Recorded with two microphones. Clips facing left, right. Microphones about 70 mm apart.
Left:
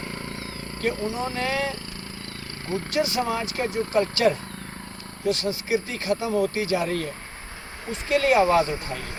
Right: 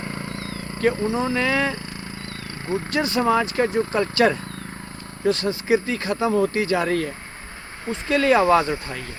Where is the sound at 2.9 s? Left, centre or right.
Right.